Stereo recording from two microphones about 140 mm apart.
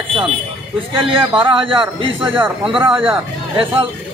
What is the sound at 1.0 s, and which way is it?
Speech, 40° right (ahead or behind).